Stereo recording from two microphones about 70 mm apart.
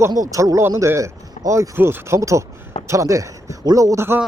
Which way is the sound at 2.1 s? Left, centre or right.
Right.